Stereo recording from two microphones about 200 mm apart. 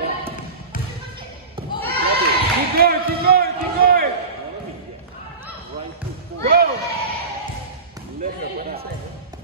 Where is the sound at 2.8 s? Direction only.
50° right (ahead or behind).